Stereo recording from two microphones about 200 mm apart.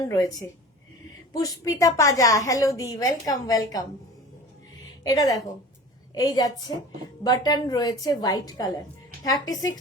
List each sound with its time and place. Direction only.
0.1 s a woman's voice: 20° left (ahead or behind)
5.0 s a woman's voice: 15° left (ahead or behind)